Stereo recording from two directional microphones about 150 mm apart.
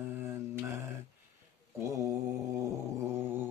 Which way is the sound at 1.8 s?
20° right (ahead or behind).